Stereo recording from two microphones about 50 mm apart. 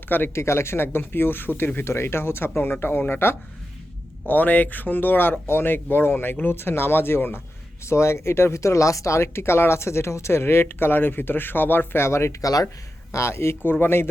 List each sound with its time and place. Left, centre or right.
0.3 s speech: left
4.3 s speech: left
7.9 s speech: left
13.6 s speech: left